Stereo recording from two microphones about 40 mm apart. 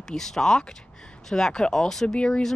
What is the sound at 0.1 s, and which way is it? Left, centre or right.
Speech, centre.